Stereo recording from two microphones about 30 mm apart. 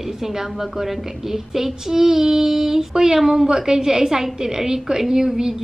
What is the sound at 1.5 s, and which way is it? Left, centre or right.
A woman's voice, centre.